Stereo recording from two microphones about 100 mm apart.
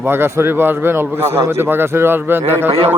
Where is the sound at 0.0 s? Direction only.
25° right (ahead or behind).